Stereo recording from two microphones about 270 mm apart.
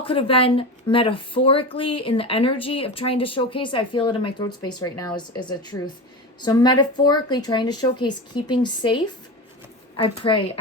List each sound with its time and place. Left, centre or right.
0.0 s speech: centre